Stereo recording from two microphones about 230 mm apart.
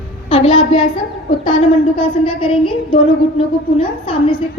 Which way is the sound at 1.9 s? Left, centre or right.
Left.